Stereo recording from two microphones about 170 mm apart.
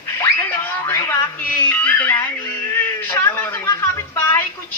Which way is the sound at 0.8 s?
15° left (ahead or behind).